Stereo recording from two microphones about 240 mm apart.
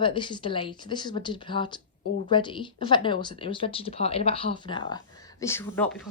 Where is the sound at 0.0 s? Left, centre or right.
Left.